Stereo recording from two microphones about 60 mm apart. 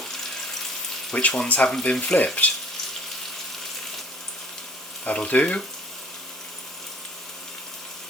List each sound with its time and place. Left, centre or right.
1.1 s speech: centre
5.0 s speech: left